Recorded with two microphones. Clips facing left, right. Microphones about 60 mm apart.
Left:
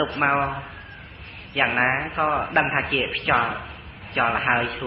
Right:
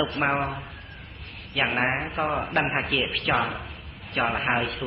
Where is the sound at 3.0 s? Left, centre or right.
Left.